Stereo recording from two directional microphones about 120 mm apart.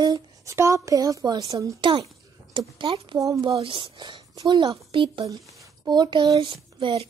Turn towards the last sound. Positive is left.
turn(degrees=-40)  # may be behind; listen again after turning